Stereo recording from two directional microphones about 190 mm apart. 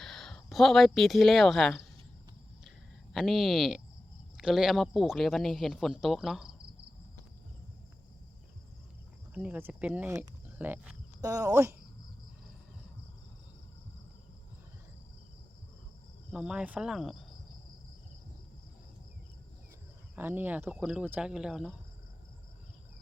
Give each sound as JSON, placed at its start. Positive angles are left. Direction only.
{"t": 0.0, "sound": "speech", "side_deg": 0}
{"t": 2.6, "sound": "a sound", "side_deg": 0}
{"t": 4.4, "sound": "speech", "side_deg": -5}
{"t": 9.3, "sound": "speech", "side_deg": -10}
{"t": 16.3, "sound": "speech", "side_deg": -5}
{"t": 20.1, "sound": "speech", "side_deg": -10}